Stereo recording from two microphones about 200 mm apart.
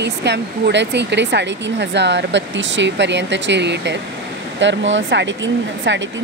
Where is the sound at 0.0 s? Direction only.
60° right (ahead or behind).